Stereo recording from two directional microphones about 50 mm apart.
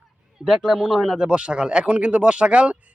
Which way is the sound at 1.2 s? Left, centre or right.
Right.